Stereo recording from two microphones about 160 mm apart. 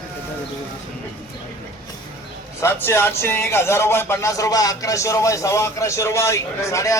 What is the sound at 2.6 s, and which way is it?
A man's voice, 15° left (ahead or behind).